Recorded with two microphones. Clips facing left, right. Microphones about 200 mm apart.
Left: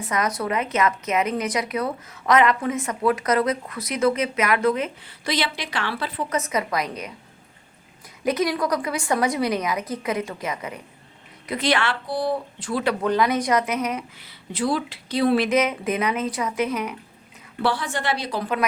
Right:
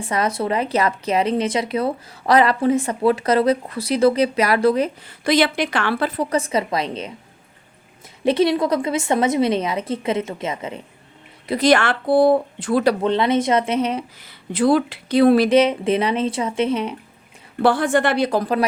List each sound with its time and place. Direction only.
0.0 s a woman's voice: 30° right (ahead or behind)
5.2 s speech: 50° right (ahead or behind)
6.3 s a woman's voice: 30° right (ahead or behind)
8.2 s a woman's voice: 30° right (ahead or behind)
11.4 s speech: 40° right (ahead or behind); by 12.8 s 55° right (ahead or behind)
13.0 s a woman's voice: 25° right (ahead or behind)
14.2 s speech: 50° right (ahead or behind)
15.4 s a woman's voice: 30° right (ahead or behind)
17.6 s speech: 50° right (ahead or behind)